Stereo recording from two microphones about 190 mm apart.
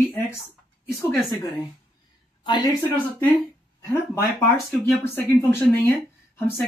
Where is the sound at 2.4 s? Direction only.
20° left (ahead or behind).